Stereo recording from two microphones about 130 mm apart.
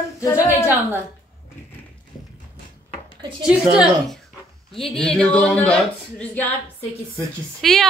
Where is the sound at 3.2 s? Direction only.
40° right (ahead or behind).